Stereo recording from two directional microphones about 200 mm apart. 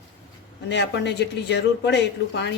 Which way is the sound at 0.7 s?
60° left (ahead or behind).